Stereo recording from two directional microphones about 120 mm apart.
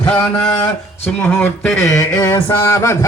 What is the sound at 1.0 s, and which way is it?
Speech, 15° left (ahead or behind).